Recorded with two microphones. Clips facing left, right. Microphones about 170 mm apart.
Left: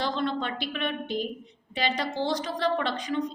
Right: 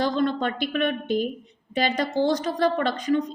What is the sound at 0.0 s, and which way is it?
A woman's voice, 45° right (ahead or behind).